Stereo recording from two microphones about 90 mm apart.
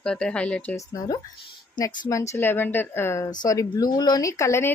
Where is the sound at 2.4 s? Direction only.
20° left (ahead or behind).